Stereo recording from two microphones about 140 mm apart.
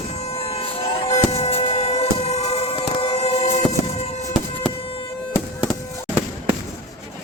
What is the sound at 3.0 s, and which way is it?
Vehicle, 50° left (ahead or behind).